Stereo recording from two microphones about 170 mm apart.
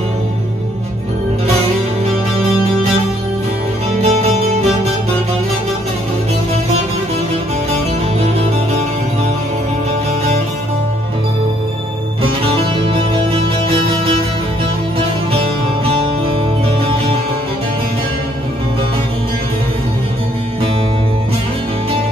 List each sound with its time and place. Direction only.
4.0 s music: 40° right (ahead or behind)
12.2 s music: 30° right (ahead or behind)